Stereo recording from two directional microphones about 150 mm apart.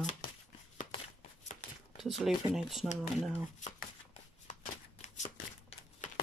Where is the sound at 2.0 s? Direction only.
Centre (ahead or behind).